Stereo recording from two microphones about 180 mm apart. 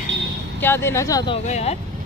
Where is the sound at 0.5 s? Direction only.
10° left (ahead or behind).